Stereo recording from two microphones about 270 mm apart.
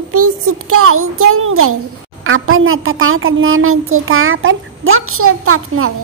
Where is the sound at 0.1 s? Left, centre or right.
Right.